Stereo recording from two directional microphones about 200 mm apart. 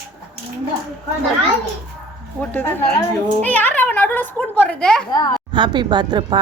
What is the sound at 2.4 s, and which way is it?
A woman's voice, 10° left (ahead or behind).